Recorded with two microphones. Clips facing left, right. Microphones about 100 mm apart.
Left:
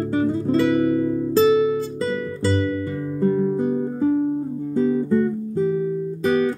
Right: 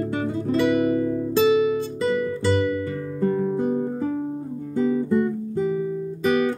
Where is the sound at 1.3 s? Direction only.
30° left (ahead or behind).